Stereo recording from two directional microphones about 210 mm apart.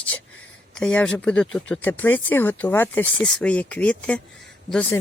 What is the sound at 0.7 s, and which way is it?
Speech, 5° left (ahead or behind).